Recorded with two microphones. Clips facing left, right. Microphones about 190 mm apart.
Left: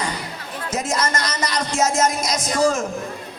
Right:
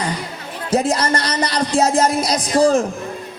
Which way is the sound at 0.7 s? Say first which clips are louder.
Right 6 dB; 35° right (ahead or behind).